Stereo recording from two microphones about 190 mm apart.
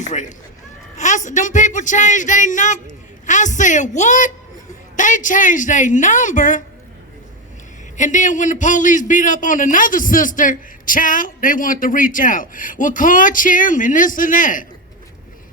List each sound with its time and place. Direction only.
0.0 s a man's voice: 40° left (ahead or behind)
7.9 s a man's voice: 40° left (ahead or behind)